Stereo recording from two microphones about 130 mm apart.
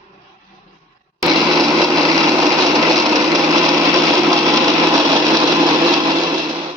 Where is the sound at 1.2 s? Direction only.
25° right (ahead or behind).